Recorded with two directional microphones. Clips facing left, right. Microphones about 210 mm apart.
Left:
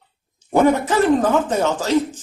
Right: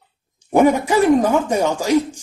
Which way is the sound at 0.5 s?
10° right (ahead or behind).